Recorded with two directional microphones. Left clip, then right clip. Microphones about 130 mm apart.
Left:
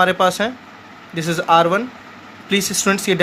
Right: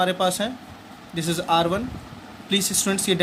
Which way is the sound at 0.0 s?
40° left (ahead or behind).